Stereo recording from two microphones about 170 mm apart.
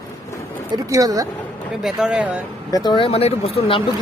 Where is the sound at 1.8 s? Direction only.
5° right (ahead or behind).